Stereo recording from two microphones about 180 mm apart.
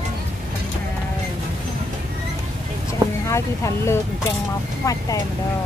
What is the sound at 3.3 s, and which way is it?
Speech, 15° left (ahead or behind).